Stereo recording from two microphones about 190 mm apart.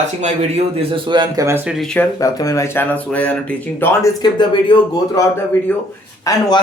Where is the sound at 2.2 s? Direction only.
15° left (ahead or behind).